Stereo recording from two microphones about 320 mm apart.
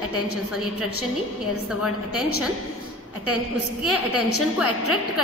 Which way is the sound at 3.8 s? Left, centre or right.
Left.